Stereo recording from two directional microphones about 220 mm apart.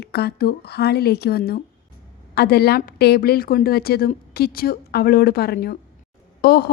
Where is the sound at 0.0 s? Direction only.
45° left (ahead or behind).